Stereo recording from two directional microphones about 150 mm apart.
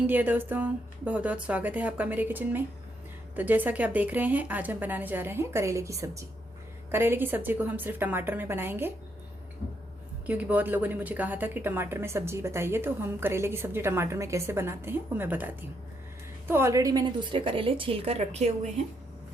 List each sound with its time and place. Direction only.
0.1 s a woman's voice: 10° right (ahead or behind)
10.2 s a woman's voice: 10° right (ahead or behind); by 18.7 s 45° right (ahead or behind)